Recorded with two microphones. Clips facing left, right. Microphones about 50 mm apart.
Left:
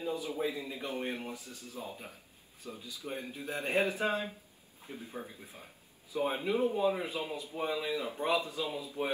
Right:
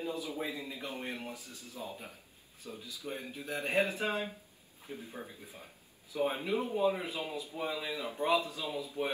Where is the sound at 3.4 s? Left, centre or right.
Left.